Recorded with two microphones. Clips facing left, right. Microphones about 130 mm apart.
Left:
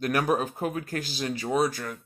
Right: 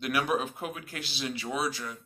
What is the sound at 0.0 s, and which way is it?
Speech, 45° left (ahead or behind).